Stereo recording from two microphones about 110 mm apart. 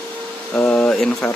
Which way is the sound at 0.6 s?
10° left (ahead or behind).